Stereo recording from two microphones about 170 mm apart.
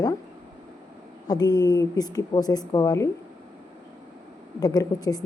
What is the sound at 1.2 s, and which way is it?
A woman's voice, 20° left (ahead or behind).